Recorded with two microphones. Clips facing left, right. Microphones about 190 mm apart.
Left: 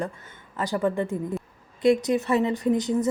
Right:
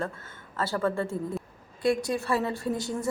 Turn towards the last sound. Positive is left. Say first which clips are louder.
# left 7 dB
turn(degrees=20)  # may be behind; listen again after turning